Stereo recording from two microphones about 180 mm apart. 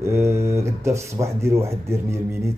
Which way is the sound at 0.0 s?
15° right (ahead or behind).